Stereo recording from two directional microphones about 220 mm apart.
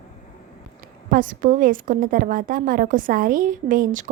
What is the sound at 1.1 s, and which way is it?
A woman's voice, 40° right (ahead or behind).